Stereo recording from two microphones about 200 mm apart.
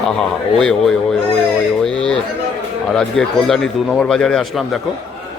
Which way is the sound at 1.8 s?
5° left (ahead or behind).